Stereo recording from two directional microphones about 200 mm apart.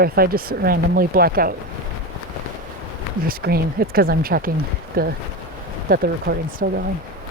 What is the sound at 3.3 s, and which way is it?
Speech, 50° right (ahead or behind).